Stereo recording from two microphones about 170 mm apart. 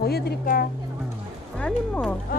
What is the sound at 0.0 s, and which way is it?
Speech, 70° left (ahead or behind).